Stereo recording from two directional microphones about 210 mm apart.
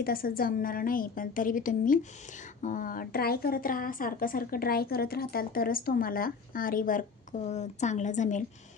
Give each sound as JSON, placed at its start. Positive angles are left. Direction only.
{"t": 0.0, "sound": "a woman's voice", "side_deg": 45}